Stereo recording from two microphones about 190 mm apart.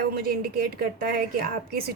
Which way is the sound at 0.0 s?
50° right (ahead or behind).